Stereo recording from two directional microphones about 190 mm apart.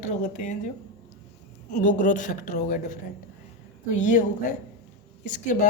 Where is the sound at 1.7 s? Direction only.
40° left (ahead or behind).